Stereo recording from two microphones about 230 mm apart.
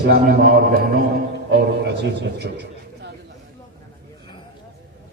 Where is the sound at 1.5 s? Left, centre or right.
Right.